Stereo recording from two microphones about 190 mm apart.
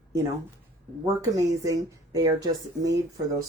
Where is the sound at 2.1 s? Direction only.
20° right (ahead or behind).